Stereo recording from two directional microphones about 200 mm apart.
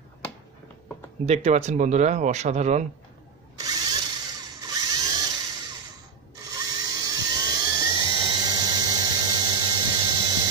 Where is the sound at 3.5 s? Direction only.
20° right (ahead or behind).